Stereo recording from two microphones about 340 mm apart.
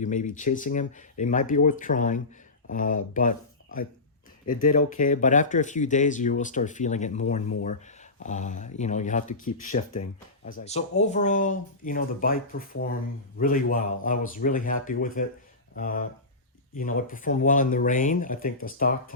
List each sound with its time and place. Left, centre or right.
0.0 s speech: left